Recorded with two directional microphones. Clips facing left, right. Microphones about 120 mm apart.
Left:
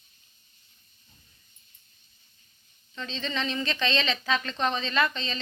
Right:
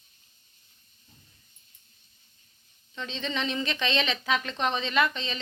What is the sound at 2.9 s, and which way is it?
A woman's voice, 15° right (ahead or behind).